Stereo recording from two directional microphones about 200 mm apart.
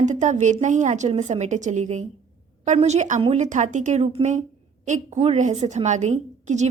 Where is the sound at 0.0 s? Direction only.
35° right (ahead or behind).